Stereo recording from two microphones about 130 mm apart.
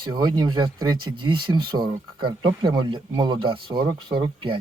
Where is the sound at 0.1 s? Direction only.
35° right (ahead or behind).